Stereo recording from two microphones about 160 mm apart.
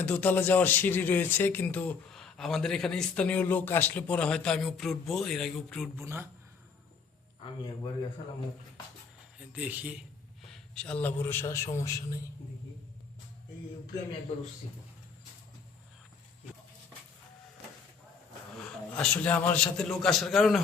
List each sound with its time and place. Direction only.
0.0 s speech: 10° left (ahead or behind)
6.0 s speech: 15° right (ahead or behind)
9.5 s speech: 10° right (ahead or behind)
10.4 s a man's voice: 5° left (ahead or behind)
18.9 s a man's voice: 10° left (ahead or behind)